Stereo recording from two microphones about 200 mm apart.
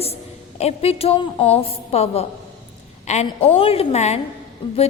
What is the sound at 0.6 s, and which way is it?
A woman's voice, 30° left (ahead or behind).